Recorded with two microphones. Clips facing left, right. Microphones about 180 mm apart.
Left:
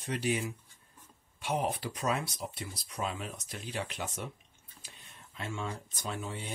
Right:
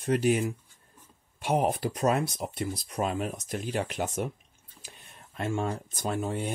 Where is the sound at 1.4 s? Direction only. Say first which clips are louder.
Right 6 dB; 45° right (ahead or behind).